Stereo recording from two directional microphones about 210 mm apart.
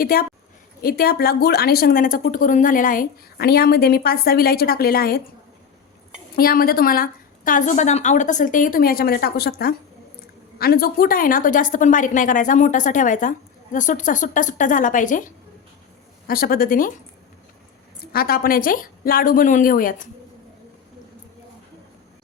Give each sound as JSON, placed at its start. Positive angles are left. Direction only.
{"t": 0.0, "sound": "a woman's voice", "side_deg": 45}
{"t": 6.3, "sound": "a woman's voice", "side_deg": 45}
{"t": 16.2, "sound": "a woman's voice", "side_deg": 45}
{"t": 18.1, "sound": "a woman's voice", "side_deg": 45}